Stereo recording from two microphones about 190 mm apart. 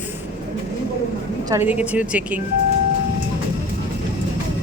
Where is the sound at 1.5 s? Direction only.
10° right (ahead or behind).